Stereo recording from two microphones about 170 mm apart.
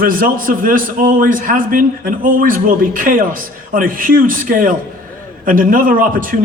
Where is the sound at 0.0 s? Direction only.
55° right (ahead or behind).